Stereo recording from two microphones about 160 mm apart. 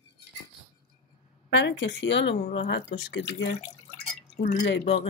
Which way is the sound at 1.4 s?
90° left.